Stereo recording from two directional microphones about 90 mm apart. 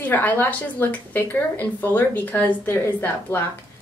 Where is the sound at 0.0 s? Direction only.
20° left (ahead or behind).